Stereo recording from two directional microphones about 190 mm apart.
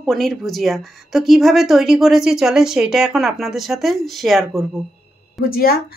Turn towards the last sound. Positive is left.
turn(degrees=50)  # may be behind; listen again after turning